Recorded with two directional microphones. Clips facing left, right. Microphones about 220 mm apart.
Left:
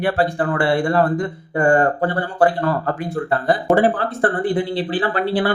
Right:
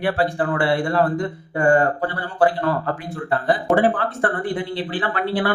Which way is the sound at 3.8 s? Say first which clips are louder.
Left 2 dB; 35° left (ahead or behind).